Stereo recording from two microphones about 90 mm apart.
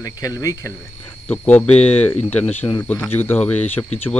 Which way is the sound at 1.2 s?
20° left (ahead or behind).